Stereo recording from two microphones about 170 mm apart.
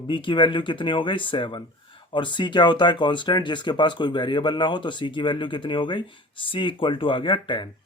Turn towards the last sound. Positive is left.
turn(degrees=30)  # may be behind; listen again after turning